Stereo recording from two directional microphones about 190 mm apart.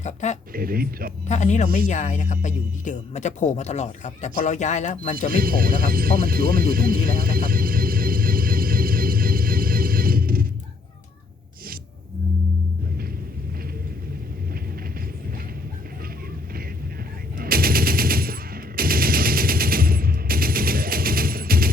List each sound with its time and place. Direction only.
0.0 s speech: 40° left (ahead or behind)
0.5 s speech: 50° right (ahead or behind)
1.3 s speech: 40° left (ahead or behind)
5.3 s music: 50° right (ahead or behind)
17.3 s machine gun: 50° right (ahead or behind)